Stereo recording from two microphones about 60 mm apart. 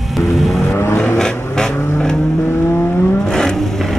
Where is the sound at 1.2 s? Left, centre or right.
Centre.